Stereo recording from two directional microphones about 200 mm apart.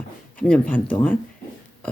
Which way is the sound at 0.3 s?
5° left (ahead or behind).